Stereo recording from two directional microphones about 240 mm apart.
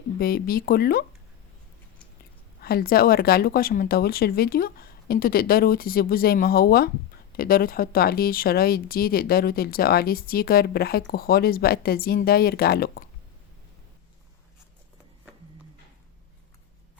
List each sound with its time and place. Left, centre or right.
0.2 s speech: left
2.6 s speech: left